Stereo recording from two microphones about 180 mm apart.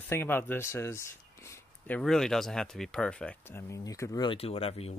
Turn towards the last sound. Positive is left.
turn(degrees=35)  # may be behind; listen again after turning